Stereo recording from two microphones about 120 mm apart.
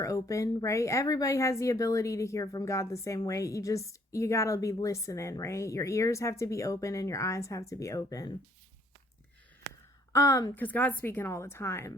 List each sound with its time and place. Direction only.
0.0 s speech: 25° left (ahead or behind)
10.1 s a woman's voice: 25° left (ahead or behind)
10.5 s speech: 15° left (ahead or behind)